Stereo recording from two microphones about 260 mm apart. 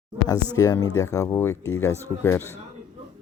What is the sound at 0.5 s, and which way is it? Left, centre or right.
Speech, centre.